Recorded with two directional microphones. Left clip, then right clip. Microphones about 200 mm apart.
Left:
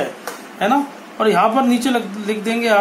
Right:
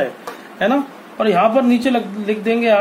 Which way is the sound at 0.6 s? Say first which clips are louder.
Even; 40° right (ahead or behind).